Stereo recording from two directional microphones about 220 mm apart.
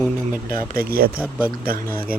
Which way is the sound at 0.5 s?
40° right (ahead or behind).